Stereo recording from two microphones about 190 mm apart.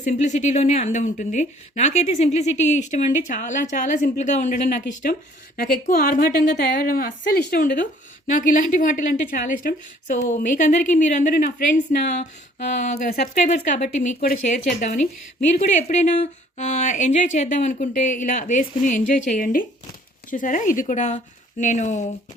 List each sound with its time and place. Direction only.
0.0 s a woman's voice: 40° left (ahead or behind); by 7.9 s 55° left (ahead or behind)
8.3 s a woman's voice: 45° left (ahead or behind)